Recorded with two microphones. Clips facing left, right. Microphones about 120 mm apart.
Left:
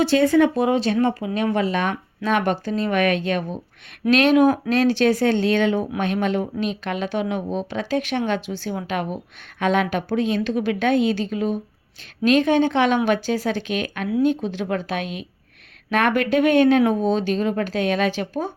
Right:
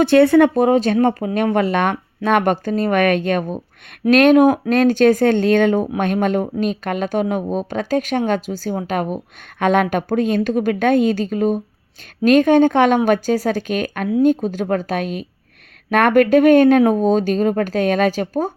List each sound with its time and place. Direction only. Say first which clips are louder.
0.0 s speech: right 5 dB; 60° right (ahead or behind); by 9.1 s 40° right (ahead or behind)
9.6 s speech: right 4 dB; 50° right (ahead or behind)